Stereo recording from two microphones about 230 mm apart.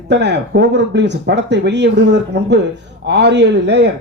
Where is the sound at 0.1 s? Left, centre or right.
Right.